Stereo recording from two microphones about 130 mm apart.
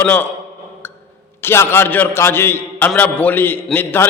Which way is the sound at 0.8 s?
15° left (ahead or behind).